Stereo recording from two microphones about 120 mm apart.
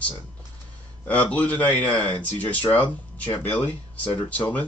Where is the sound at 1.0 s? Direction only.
10° left (ahead or behind).